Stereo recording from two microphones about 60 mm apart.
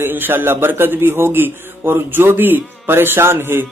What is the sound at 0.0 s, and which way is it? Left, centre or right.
A man's voice, right.